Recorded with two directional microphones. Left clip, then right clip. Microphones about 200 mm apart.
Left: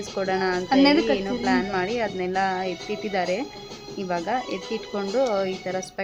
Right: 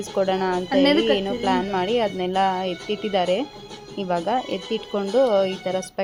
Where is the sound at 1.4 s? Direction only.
15° right (ahead or behind).